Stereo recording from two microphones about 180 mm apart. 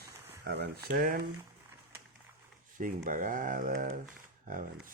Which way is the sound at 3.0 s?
45° right (ahead or behind).